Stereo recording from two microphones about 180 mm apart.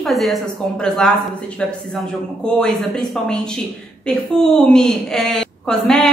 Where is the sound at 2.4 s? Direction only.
5° left (ahead or behind).